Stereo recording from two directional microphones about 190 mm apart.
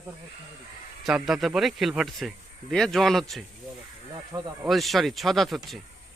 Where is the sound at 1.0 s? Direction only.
Centre (ahead or behind).